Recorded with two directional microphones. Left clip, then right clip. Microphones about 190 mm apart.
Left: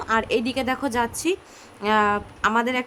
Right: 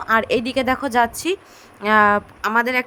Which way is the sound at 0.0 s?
25° right (ahead or behind).